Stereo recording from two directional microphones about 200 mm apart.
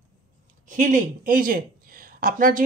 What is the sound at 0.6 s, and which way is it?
Speech, 40° right (ahead or behind).